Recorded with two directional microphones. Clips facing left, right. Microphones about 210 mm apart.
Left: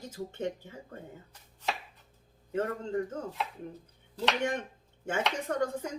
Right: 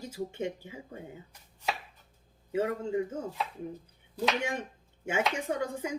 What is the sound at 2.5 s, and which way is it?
Speech, 10° right (ahead or behind).